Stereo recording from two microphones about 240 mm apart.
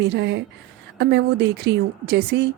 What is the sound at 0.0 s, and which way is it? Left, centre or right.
Speech, right.